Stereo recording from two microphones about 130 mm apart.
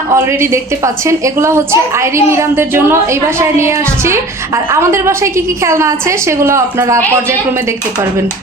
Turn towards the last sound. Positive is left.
turn(degrees=-20)  # may be behind; listen again after turning